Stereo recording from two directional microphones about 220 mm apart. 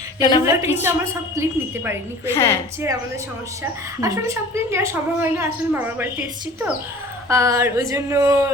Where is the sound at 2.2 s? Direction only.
10° left (ahead or behind).